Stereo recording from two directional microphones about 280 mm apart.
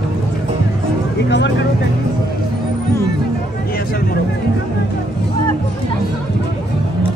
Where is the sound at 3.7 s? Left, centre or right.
Left.